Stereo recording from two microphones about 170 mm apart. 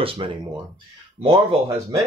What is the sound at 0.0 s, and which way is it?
Speech, 30° right (ahead or behind).